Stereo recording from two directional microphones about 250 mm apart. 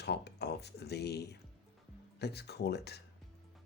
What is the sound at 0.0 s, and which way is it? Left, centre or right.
Speech, left.